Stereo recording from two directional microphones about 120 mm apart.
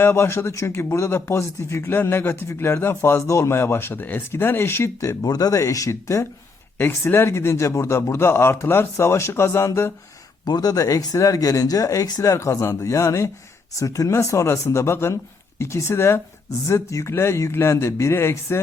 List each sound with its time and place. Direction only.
0.0 s speech: 20° left (ahead or behind)
10.4 s speech: 35° left (ahead or behind)